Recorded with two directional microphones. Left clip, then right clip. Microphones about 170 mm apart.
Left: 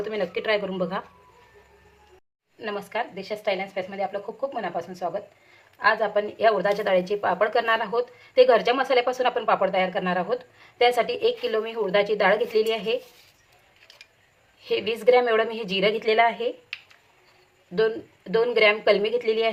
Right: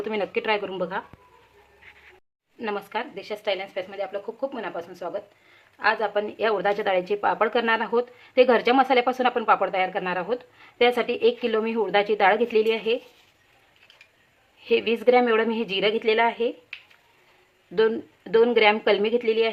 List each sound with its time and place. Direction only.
0.1 s speech: 35° right (ahead or behind)
2.6 s speech: 45° right (ahead or behind); by 13.0 s 25° right (ahead or behind)
14.6 s a woman's voice: 25° right (ahead or behind)
17.7 s speech: 35° right (ahead or behind)